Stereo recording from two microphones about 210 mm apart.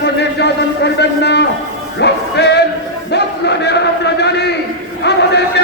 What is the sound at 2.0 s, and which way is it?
Music, 55° left (ahead or behind).